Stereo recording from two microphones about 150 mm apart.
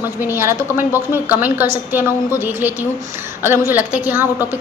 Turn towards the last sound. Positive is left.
turn(degrees=-15)  # may be behind; listen again after turning